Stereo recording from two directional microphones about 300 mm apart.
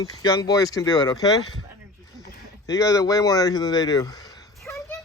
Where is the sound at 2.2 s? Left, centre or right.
Centre.